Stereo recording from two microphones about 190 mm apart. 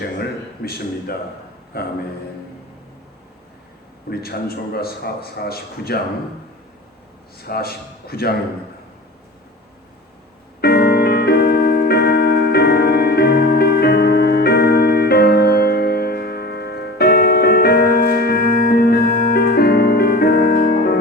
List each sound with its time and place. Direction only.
0.2 s a man's voice: 55° left (ahead or behind)
4.1 s a man's voice: 55° left (ahead or behind)
7.4 s a man's voice: 55° left (ahead or behind)
10.6 s music: 55° left (ahead or behind)